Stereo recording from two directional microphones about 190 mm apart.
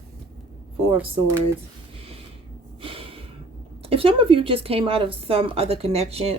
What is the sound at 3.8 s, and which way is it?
Speech, 30° right (ahead or behind).